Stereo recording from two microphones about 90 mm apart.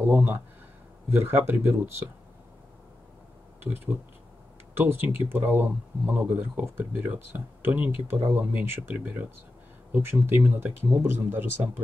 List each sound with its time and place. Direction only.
0.0 s speech: 20° right (ahead or behind)
3.6 s speech: 20° right (ahead or behind)